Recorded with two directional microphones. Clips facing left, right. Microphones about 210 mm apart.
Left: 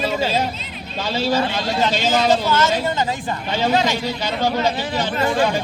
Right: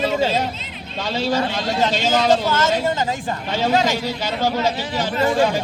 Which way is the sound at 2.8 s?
45° right (ahead or behind).